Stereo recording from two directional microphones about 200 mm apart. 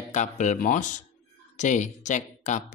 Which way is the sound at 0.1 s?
35° left (ahead or behind).